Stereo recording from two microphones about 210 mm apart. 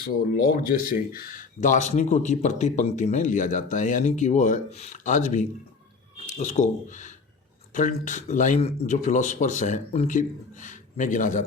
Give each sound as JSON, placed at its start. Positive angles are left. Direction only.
{"t": 0.0, "sound": "speech", "side_deg": 45}